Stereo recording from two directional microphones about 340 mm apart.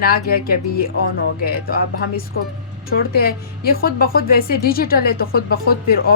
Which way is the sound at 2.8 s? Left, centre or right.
Left.